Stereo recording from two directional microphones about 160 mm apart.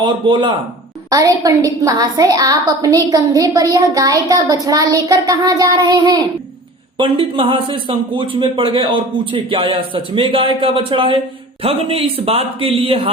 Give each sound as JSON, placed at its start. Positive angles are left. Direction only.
{"t": 0.0, "sound": "a man's voice", "side_deg": -30}
{"t": 1.1, "sound": "a woman's voice", "side_deg": -20}